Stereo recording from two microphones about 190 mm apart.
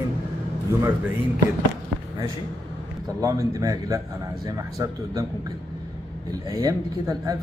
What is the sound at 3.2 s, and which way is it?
Speech, 20° right (ahead or behind).